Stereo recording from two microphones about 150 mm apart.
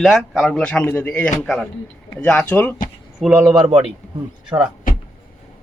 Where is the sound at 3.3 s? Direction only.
15° right (ahead or behind).